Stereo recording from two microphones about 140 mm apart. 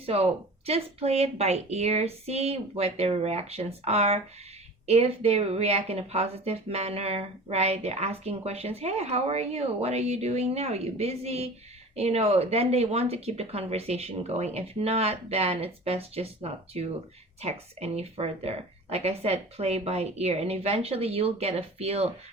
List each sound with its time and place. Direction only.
0.0 s speech: 45° right (ahead or behind)